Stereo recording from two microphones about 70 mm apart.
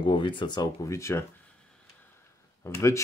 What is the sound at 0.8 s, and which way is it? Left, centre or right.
Speech, left.